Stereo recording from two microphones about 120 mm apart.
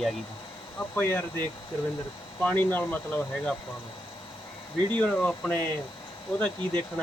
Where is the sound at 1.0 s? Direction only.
20° left (ahead or behind).